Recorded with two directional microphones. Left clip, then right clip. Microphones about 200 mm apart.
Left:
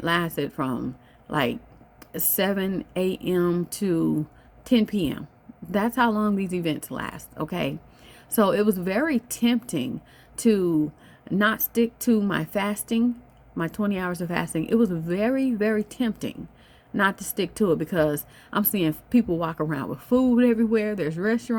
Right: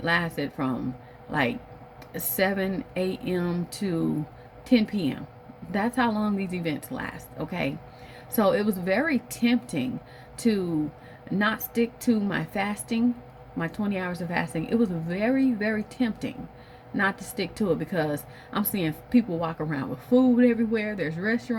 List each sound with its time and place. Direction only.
0.0 s a woman's voice: 55° left (ahead or behind)